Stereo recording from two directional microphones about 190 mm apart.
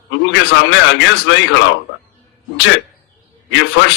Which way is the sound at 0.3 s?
75° left (ahead or behind).